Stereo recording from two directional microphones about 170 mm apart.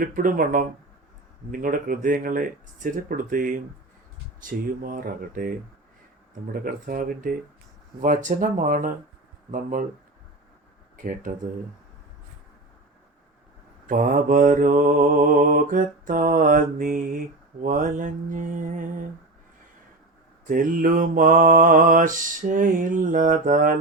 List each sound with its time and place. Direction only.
0.0 s mantra: 55° right (ahead or behind)
4.4 s speech: 55° right (ahead or behind)
8.0 s mantra: 50° right (ahead or behind)
10.9 s speech: 50° right (ahead or behind)
13.8 s mantra: 50° right (ahead or behind)
20.5 s mantra: 55° right (ahead or behind)